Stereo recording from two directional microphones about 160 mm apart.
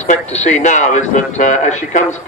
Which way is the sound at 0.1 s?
45° left (ahead or behind).